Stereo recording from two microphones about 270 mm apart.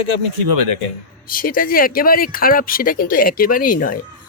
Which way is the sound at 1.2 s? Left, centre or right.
Left.